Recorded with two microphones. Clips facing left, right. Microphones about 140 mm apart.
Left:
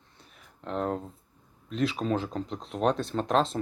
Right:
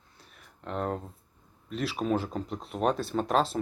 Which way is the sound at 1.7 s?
5° right (ahead or behind).